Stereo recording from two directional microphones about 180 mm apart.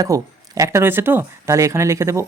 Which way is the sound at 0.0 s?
20° right (ahead or behind).